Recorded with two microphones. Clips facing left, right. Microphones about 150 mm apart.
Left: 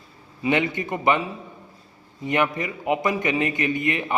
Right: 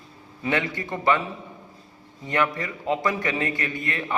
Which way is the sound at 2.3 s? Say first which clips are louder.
Left 2 dB; 20° left (ahead or behind).